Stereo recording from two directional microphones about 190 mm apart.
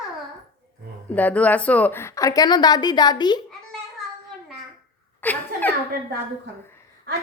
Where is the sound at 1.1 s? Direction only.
10° left (ahead or behind).